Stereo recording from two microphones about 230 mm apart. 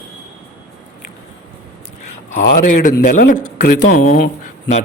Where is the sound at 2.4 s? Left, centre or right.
Left.